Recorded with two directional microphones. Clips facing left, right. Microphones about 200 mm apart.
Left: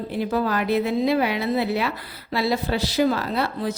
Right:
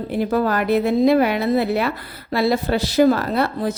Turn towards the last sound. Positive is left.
turn(degrees=-50)  # may be behind; listen again after turning